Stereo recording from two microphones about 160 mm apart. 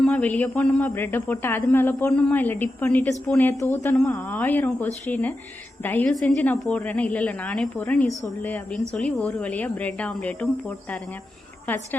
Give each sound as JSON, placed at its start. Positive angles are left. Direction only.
{"t": 0.0, "sound": "a woman's voice", "side_deg": 10}